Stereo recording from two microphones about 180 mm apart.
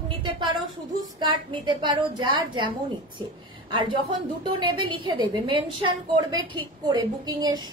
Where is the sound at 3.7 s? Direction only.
30° right (ahead or behind).